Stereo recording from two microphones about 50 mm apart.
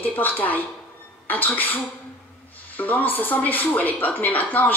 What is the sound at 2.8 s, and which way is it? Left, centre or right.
A woman's voice, left.